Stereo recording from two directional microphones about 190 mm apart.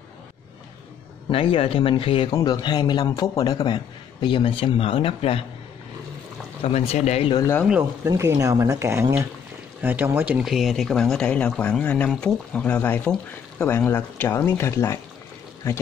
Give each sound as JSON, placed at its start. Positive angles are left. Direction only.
{"t": 1.3, "sound": "a man's voice", "side_deg": 30}
{"t": 6.6, "sound": "speech", "side_deg": 35}
{"t": 7.3, "sound": "speech", "side_deg": 15}
{"t": 7.6, "sound": "speech", "side_deg": -5}